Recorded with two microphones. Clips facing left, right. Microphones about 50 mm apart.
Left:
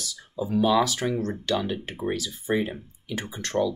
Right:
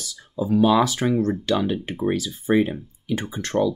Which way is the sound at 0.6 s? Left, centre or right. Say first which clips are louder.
Right 3 dB; right.